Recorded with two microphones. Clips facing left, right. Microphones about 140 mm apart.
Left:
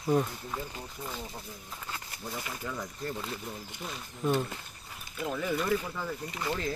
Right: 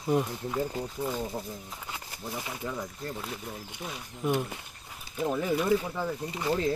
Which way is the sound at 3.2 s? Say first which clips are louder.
Even; 5° right (ahead or behind).